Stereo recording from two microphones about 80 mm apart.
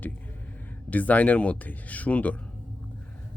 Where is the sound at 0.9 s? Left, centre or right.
Centre.